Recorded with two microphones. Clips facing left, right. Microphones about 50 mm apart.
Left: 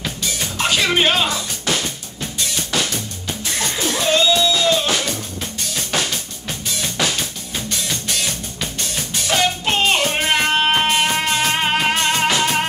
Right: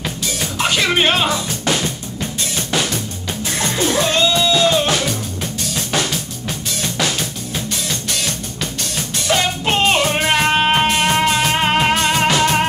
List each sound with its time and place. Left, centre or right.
0.2 s music: centre
2.7 s drum kit: centre
3.4 s music: centre
5.8 s drum kit: centre
6.7 s music: centre
9.7 s music: centre